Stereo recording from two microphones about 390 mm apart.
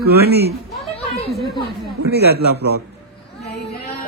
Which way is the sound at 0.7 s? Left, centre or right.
Centre.